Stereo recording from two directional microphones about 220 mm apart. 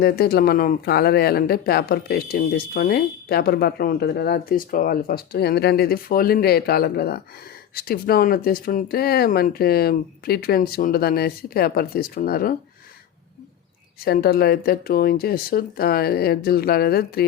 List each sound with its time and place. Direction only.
0.0 s speech: 45° left (ahead or behind)
14.0 s speech: 45° left (ahead or behind)